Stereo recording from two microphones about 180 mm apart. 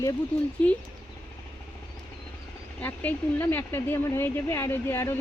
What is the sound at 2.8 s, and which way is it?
Speech, 10° left (ahead or behind).